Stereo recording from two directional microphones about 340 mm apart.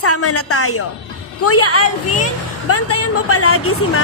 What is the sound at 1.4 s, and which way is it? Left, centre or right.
A woman's voice, left.